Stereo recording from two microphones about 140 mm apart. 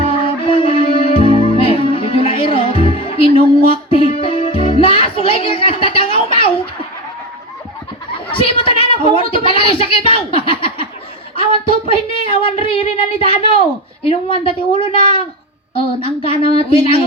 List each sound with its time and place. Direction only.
0.1 s music: 40° left (ahead or behind)
8.3 s a woman's voice: 40° left (ahead or behind)